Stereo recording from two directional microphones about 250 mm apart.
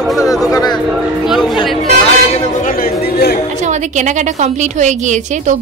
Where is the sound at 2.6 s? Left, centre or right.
Left.